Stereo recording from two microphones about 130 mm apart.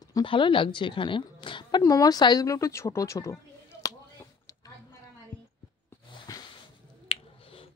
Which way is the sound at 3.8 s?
25° left (ahead or behind).